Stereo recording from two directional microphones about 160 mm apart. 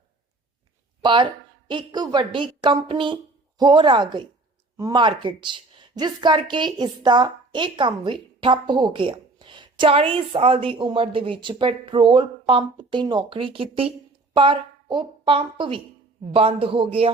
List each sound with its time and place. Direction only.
1.0 s a woman's voice: 30° right (ahead or behind)